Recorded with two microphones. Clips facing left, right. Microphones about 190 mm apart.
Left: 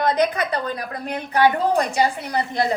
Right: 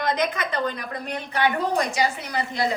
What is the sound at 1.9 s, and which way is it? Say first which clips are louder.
Speech: left 4 dB; 55° left (ahead or behind).